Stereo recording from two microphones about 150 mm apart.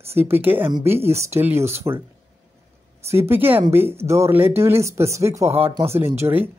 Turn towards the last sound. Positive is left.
turn(degrees=-15)  # may be behind; listen again after turning